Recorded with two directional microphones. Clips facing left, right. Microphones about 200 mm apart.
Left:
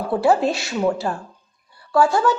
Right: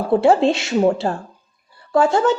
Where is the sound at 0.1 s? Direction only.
25° right (ahead or behind).